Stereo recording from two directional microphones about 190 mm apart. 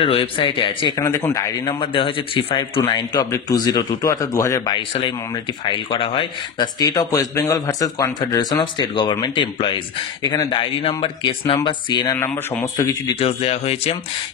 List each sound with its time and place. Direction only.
0.0 s speech: 30° left (ahead or behind)
0.9 s a man's voice: 15° left (ahead or behind)
1.7 s speech: 30° left (ahead or behind)
12.2 s a man's voice: 10° left (ahead or behind)
13.2 s a man's voice: 30° left (ahead or behind)